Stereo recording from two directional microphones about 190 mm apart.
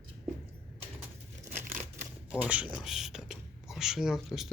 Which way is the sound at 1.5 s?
40° right (ahead or behind).